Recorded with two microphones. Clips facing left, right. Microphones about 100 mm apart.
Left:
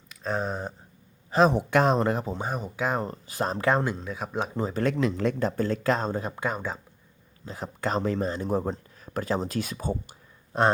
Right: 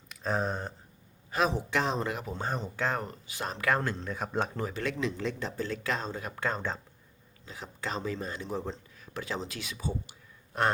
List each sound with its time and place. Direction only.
0.1 s a sound: centre (ahead or behind)
1.5 s speech: 50° left (ahead or behind)
2.3 s speech: 10° left (ahead or behind)
3.0 s speech: 35° left (ahead or behind)
3.7 s speech: 20° left (ahead or behind)
3.9 s speech: 5° left (ahead or behind)
4.7 s speech: 40° left (ahead or behind)
4.9 s speech: 55° left (ahead or behind); by 6.2 s 40° left (ahead or behind)
6.2 s speech: 15° left (ahead or behind)
7.4 s speech: 45° left (ahead or behind)
8.2 s speech: 45° left (ahead or behind)
10.5 s speech: 25° left (ahead or behind)